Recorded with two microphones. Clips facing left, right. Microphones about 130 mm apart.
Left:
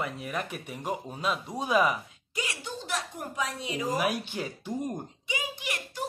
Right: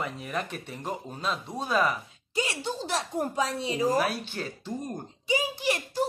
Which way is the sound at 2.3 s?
30° right (ahead or behind).